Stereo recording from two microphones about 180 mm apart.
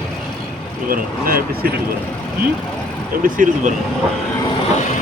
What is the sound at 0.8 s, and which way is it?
Speech, 55° right (ahead or behind).